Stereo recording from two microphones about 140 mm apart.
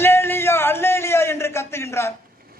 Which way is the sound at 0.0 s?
15° left (ahead or behind).